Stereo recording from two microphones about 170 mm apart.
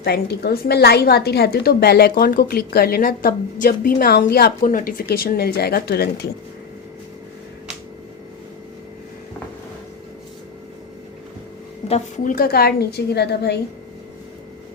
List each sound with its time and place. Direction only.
0.0 s a woman's voice: 70° left (ahead or behind)
11.9 s a woman's voice: 40° left (ahead or behind); by 13.6 s 75° left (ahead or behind)